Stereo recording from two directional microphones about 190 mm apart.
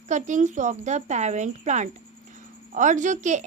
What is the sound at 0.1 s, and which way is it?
A woman's voice, 40° right (ahead or behind).